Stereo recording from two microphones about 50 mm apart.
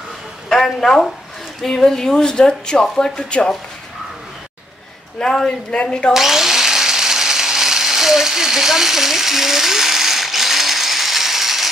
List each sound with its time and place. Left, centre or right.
0.5 s speech: centre
5.2 s speech: centre
6.1 s a sound: centre